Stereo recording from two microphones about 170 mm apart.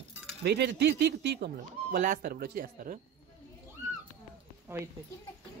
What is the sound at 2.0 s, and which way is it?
Speech, 55° right (ahead or behind).